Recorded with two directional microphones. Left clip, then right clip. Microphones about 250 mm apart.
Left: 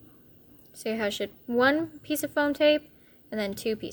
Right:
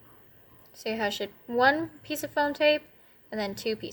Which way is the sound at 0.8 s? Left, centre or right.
Left.